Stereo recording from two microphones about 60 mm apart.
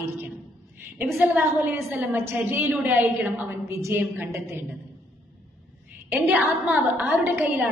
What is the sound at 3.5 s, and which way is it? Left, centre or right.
Speech, right.